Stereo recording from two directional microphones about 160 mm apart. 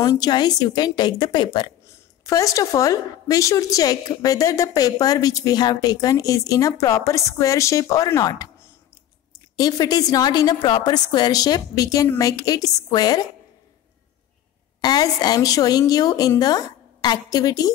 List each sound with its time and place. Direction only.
0.0 s a woman's voice: 25° left (ahead or behind)
9.6 s a woman's voice: 25° left (ahead or behind)
14.8 s a woman's voice: 25° left (ahead or behind)